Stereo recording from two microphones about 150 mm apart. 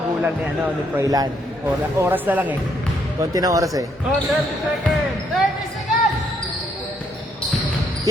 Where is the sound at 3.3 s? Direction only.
25° right (ahead or behind).